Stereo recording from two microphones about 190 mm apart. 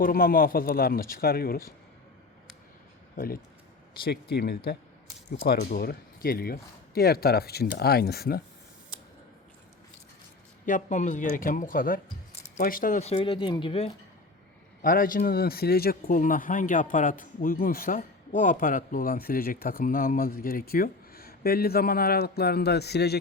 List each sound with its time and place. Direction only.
0.0 s a man's voice: 50° left (ahead or behind)
3.2 s a man's voice: 50° left (ahead or behind)
10.7 s a man's voice: 40° left (ahead or behind)
14.8 s a man's voice: 50° left (ahead or behind)